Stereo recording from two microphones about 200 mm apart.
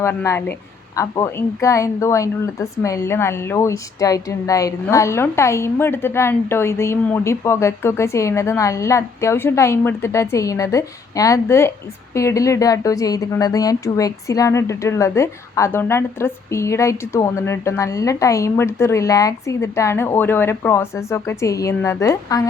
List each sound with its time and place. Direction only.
0.0 s a woman's voice: 10° left (ahead or behind)